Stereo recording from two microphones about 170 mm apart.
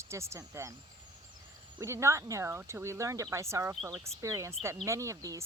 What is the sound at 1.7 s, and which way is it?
Speech, 15° right (ahead or behind).